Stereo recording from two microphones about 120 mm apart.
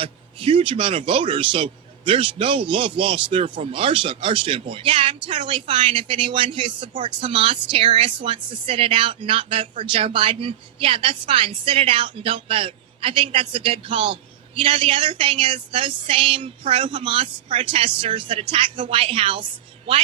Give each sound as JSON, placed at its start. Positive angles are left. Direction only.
{"t": 0.0, "sound": "speech", "side_deg": -45}